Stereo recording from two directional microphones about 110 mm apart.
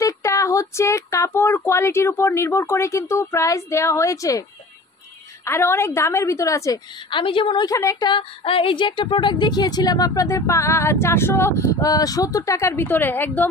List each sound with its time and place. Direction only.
0.0 s speech: 30° left (ahead or behind)
7.1 s a woman's voice: 50° left (ahead or behind)
7.6 s a woman's voice: 30° left (ahead or behind)
8.1 s a woman's voice: 55° left (ahead or behind); by 13.5 s 15° left (ahead or behind)